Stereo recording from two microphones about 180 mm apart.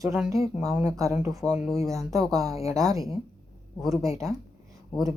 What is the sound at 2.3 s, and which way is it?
Speech, 20° right (ahead or behind).